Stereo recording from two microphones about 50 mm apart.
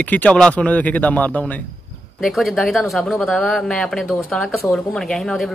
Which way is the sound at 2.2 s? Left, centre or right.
Centre.